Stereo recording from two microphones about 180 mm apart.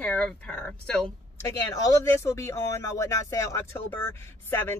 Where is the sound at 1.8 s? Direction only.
15° left (ahead or behind).